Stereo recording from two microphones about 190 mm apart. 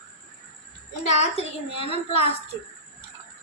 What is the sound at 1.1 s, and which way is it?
A woman's voice, 30° left (ahead or behind).